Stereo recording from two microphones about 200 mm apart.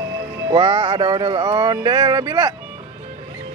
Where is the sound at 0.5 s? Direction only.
25° right (ahead or behind).